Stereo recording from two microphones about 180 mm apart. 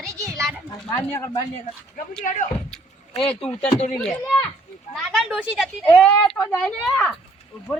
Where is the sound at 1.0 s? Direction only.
15° left (ahead or behind).